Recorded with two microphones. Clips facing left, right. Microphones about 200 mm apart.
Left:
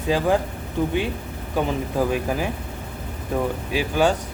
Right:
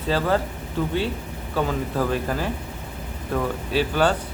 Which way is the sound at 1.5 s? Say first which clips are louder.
Left 1 dB; 15° left (ahead or behind).